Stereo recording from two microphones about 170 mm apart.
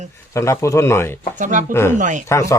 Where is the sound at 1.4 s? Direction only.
50° right (ahead or behind).